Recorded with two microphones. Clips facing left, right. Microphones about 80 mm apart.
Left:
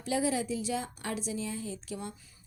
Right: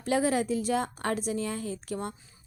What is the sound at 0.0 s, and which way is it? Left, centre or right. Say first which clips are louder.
A woman's voice: right 4 dB; right.